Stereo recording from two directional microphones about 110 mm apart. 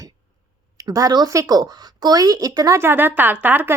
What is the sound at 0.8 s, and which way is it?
A woman's voice, 35° right (ahead or behind).